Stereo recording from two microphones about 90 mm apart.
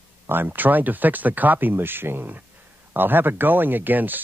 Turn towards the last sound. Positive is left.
turn(degrees=-20)  # may be behind; listen again after turning